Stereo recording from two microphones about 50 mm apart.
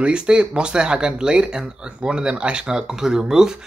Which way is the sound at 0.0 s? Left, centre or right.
Centre.